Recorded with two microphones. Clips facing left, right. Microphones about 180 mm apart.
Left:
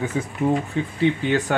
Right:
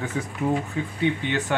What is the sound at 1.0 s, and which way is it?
Speech, 40° left (ahead or behind).